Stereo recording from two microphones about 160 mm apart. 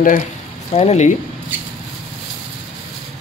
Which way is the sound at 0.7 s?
45° left (ahead or behind).